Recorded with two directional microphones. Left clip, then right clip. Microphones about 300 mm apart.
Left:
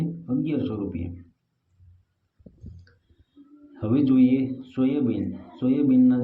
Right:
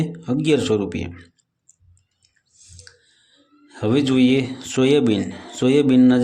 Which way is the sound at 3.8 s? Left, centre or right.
Right.